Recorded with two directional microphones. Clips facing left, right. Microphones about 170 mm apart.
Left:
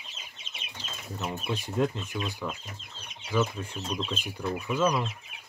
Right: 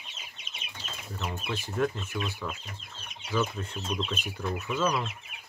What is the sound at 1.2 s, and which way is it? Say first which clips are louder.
Speech: left 2 dB; 15° left (ahead or behind).